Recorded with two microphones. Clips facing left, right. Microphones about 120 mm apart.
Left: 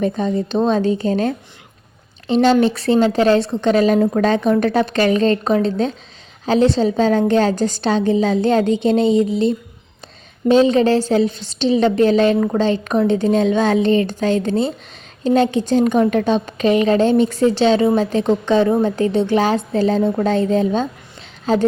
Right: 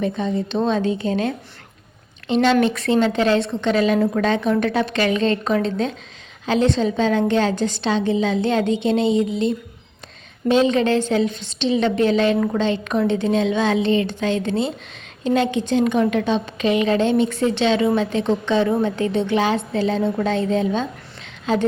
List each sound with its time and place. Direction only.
0.0 s a woman's voice: 40° left (ahead or behind)